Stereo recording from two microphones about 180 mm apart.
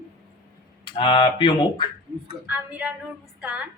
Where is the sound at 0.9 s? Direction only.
25° left (ahead or behind).